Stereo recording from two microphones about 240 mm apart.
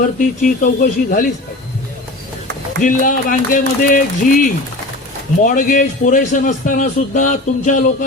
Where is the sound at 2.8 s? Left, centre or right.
Left.